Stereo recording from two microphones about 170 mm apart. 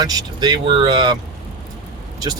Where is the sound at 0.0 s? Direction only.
25° right (ahead or behind).